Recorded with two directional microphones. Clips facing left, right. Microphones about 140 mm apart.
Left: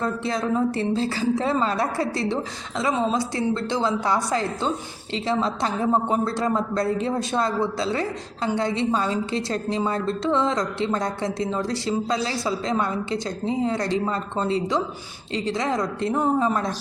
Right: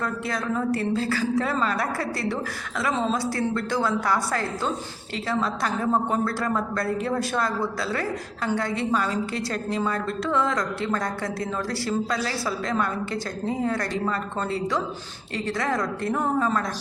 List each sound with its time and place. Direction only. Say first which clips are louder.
0.0 s a woman's voice: left 3 dB; 25° left (ahead or behind)